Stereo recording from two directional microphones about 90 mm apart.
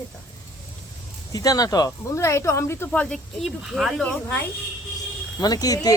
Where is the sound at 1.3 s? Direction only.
40° left (ahead or behind).